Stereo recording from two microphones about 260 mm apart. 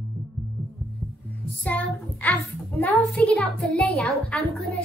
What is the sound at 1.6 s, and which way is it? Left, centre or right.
A child's voice, centre.